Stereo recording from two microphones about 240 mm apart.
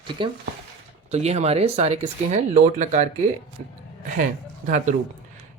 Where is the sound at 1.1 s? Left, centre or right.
Right.